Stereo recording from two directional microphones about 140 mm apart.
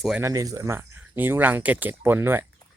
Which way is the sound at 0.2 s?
20° right (ahead or behind).